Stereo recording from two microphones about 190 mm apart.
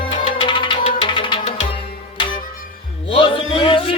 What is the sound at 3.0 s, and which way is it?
Music, 25° left (ahead or behind).